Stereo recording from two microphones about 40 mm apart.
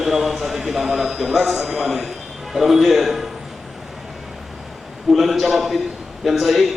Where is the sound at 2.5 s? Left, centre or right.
Centre.